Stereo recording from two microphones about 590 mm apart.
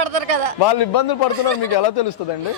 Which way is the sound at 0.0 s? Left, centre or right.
Right.